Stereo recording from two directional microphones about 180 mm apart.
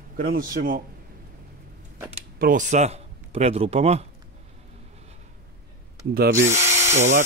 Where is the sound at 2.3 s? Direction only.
50° right (ahead or behind).